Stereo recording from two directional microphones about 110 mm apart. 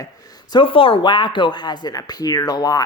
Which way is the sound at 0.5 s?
55° left (ahead or behind).